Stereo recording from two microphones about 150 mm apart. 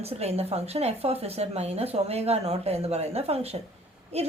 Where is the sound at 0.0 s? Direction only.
45° right (ahead or behind).